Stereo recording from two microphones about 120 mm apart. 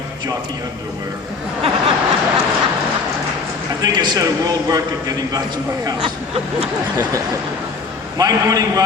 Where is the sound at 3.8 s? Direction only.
35° right (ahead or behind).